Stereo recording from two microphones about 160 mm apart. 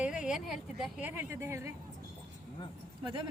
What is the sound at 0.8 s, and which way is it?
Speech, 10° right (ahead or behind).